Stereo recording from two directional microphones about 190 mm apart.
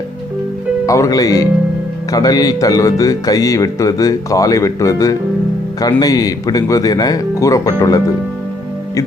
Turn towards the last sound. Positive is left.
turn(degrees=20)  # may be behind; listen again after turning